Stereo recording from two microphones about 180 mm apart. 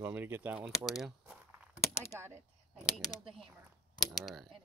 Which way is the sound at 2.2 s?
15° right (ahead or behind).